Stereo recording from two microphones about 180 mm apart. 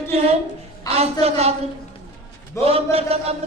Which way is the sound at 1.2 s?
35° right (ahead or behind).